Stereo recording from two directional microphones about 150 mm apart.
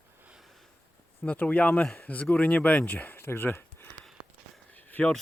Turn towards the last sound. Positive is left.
turn(degrees=10)  # may be behind; listen again after turning